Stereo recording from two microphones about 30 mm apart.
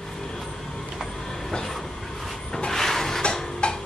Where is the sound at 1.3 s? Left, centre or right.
Centre.